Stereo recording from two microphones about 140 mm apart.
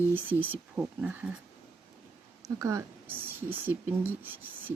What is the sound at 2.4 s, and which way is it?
A woman's voice, 25° right (ahead or behind).